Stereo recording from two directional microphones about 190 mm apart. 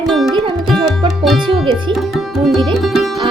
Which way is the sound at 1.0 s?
25° right (ahead or behind).